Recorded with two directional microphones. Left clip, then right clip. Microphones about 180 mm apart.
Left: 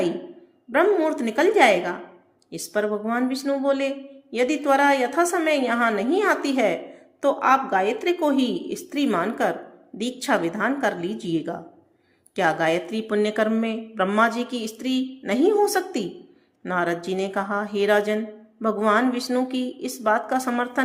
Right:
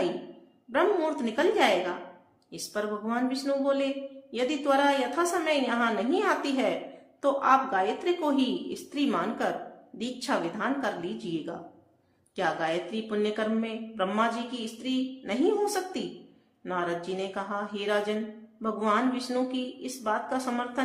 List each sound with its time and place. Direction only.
0.7 s speech: 30° left (ahead or behind)